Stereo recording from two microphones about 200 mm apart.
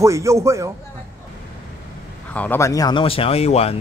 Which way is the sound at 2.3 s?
10° left (ahead or behind).